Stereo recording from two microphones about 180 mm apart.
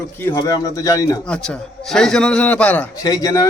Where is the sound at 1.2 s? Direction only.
5° left (ahead or behind).